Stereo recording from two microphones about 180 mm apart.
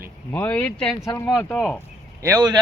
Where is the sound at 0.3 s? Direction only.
10° left (ahead or behind).